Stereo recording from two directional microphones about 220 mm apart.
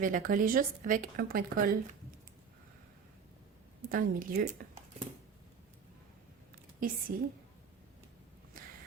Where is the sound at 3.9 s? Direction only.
40° right (ahead or behind).